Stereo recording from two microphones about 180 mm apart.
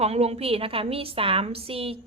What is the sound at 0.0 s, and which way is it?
A woman's voice, 35° right (ahead or behind).